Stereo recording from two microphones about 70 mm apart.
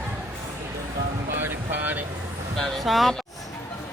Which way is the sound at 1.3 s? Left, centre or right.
Right.